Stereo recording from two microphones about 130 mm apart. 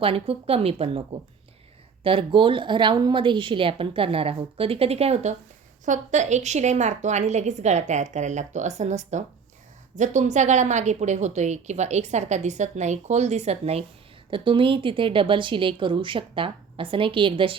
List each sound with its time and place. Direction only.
0.0 s a woman's voice: 45° right (ahead or behind)
2.0 s a woman's voice: 40° right (ahead or behind)
5.8 s speech: 70° right (ahead or behind); by 13.8 s 55° right (ahead or behind)
14.3 s a woman's voice: 40° right (ahead or behind)